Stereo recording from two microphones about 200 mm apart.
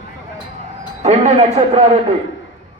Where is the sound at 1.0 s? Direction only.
35° right (ahead or behind).